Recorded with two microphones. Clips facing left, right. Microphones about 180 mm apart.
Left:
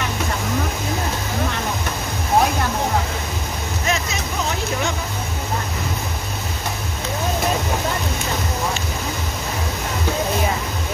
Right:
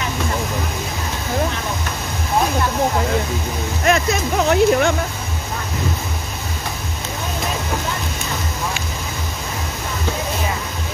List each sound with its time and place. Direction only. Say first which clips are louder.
3.8 s music: right 8 dB; 60° right (ahead or behind)